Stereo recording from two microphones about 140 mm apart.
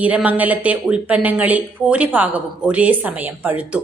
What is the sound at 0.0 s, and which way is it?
A woman's voice, 10° right (ahead or behind).